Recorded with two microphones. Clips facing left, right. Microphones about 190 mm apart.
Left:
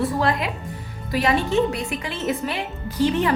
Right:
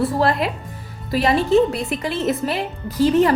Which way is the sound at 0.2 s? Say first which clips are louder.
Right 3 dB; 35° right (ahead or behind).